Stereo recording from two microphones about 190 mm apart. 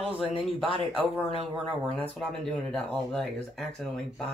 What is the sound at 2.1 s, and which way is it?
Speech, 5° left (ahead or behind).